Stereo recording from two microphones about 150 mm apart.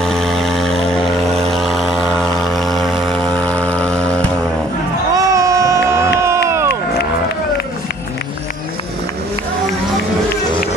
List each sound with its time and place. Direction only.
0.0 s vehicle: 5° left (ahead or behind)
5.1 s crowd: 20° right (ahead or behind)